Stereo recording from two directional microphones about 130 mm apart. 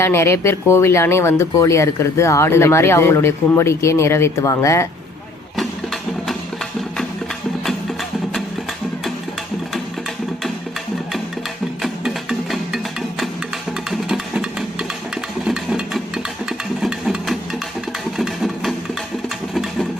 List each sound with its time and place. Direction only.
0.0 s speech: 20° left (ahead or behind)
5.5 s music: centre (ahead or behind)
11.8 s music: 5° right (ahead or behind)